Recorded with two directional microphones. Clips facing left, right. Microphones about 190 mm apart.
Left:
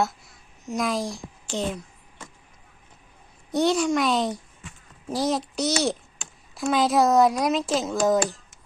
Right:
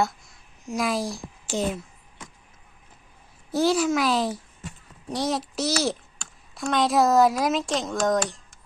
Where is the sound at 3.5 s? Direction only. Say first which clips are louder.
Even; centre (ahead or behind).